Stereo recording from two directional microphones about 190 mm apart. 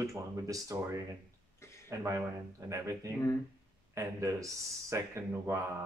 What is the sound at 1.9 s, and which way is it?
Speech, 15° right (ahead or behind).